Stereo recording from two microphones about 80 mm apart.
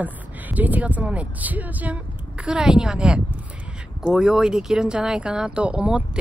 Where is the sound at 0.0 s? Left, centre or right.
Right.